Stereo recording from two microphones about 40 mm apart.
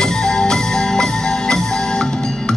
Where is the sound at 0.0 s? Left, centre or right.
Centre.